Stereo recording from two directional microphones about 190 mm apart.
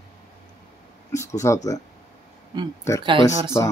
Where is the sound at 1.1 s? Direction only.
15° left (ahead or behind).